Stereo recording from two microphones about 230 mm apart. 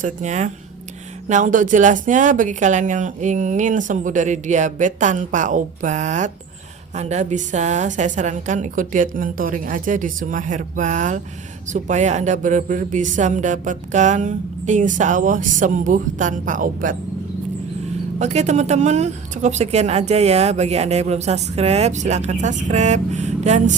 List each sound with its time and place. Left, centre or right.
0.0 s speech: right
18.2 s speech: right